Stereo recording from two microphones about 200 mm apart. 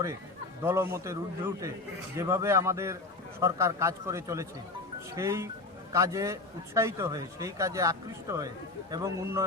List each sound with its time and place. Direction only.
0.6 s speech: 15° right (ahead or behind)